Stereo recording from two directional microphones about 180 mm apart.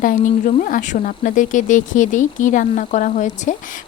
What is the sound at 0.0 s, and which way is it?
Speech, 50° left (ahead or behind).